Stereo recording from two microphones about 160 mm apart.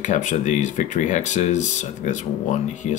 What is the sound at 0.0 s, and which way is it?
Speech, 50° left (ahead or behind).